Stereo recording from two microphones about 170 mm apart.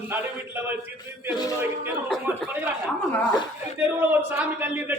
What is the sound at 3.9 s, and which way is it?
A man's voice, 10° right (ahead or behind).